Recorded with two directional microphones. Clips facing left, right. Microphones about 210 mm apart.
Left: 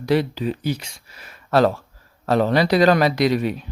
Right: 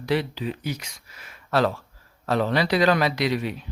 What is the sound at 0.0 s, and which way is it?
A man's voice, 40° left (ahead or behind).